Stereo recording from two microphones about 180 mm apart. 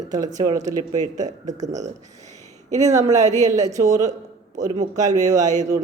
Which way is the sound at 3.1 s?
40° right (ahead or behind).